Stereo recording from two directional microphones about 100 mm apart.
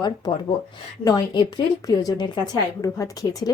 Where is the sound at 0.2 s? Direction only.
45° left (ahead or behind).